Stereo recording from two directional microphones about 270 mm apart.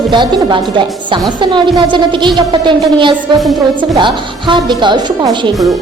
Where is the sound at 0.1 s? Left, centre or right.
Centre.